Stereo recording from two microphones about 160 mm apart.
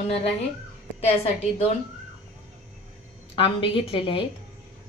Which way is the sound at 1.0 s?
40° left (ahead or behind).